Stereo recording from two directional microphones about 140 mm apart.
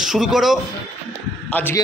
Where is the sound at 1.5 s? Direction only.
10° left (ahead or behind).